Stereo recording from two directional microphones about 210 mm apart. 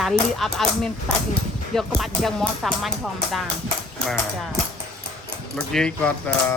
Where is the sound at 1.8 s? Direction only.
Centre (ahead or behind).